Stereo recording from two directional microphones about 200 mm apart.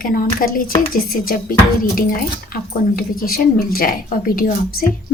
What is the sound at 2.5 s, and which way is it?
Speech, 45° left (ahead or behind).